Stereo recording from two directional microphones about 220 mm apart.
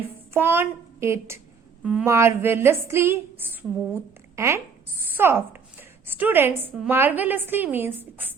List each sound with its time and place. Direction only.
0.3 s a woman's voice: 10° right (ahead or behind)